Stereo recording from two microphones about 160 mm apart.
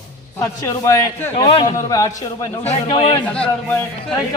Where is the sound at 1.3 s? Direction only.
30° left (ahead or behind).